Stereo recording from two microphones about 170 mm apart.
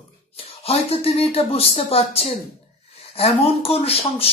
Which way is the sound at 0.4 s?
35° left (ahead or behind).